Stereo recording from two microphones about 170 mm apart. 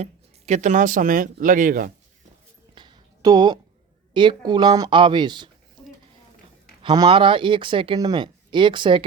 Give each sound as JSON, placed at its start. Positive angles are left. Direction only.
{"t": 0.0, "sound": "speech", "side_deg": -40}
{"t": 2.7, "sound": "a sound", "side_deg": -25}
{"t": 4.1, "sound": "speech", "side_deg": -30}
{"t": 6.8, "sound": "speech", "side_deg": -25}